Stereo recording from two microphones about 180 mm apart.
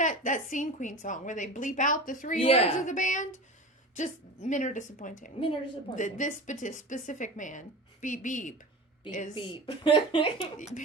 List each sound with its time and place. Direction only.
0.0 s a woman's voice: 45° left (ahead or behind)
2.4 s a woman's voice: 35° left (ahead or behind)
9.3 s speech: 30° left (ahead or behind)
10.6 s a woman's voice: 45° left (ahead or behind)